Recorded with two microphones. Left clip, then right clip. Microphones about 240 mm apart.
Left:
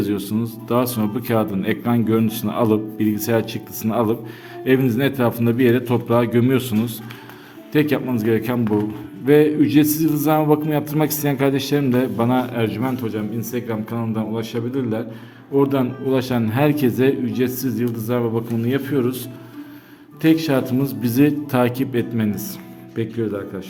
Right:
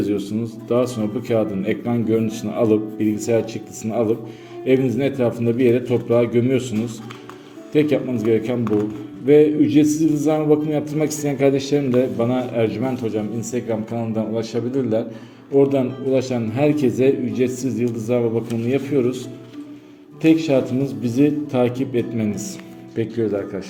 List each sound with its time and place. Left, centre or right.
0.0 s a man's voice: left
20.2 s a man's voice: centre